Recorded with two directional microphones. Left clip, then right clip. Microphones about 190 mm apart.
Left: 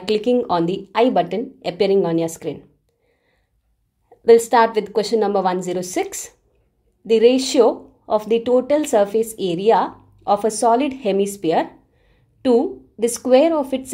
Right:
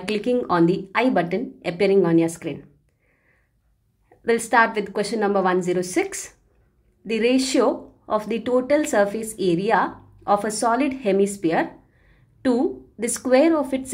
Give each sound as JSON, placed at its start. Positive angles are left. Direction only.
{"t": 0.1, "sound": "a woman's voice", "side_deg": 35}
{"t": 4.2, "sound": "a woman's voice", "side_deg": 40}
{"t": 13.2, "sound": "speech", "side_deg": 30}